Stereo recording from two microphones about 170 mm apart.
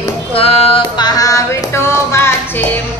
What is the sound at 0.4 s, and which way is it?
Music, 35° left (ahead or behind).